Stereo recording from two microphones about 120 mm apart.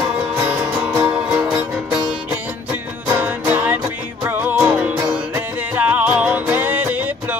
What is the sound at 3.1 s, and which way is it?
Music, 15° right (ahead or behind).